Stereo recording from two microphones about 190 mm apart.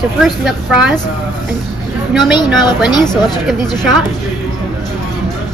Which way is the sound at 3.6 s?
20° left (ahead or behind).